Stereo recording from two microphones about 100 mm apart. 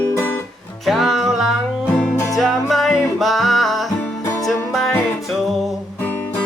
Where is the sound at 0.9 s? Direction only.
Centre (ahead or behind).